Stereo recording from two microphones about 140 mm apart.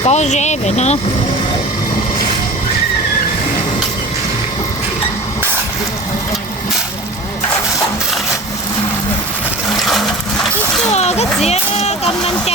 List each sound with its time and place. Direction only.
0.0 s speech: 55° left (ahead or behind)
9.6 s a sound: centre (ahead or behind)
10.9 s speech: 50° left (ahead or behind)